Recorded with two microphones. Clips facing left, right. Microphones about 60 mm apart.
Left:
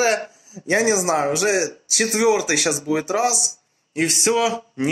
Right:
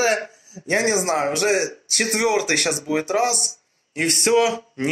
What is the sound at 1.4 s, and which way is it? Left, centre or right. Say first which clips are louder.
Speech: even; left.